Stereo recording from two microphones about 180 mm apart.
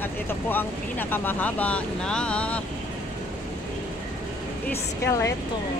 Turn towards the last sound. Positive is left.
turn(degrees=15)  # may be behind; listen again after turning